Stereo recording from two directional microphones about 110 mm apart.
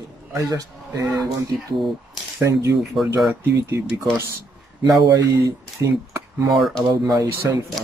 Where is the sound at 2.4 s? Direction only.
25° right (ahead or behind).